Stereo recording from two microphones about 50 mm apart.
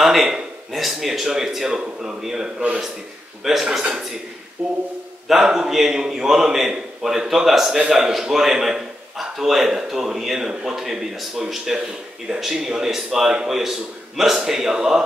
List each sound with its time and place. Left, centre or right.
0.0 s a man's voice: centre
3.6 s a man's voice: centre